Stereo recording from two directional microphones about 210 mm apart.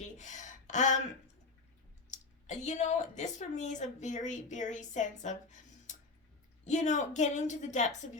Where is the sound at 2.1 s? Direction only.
35° left (ahead or behind).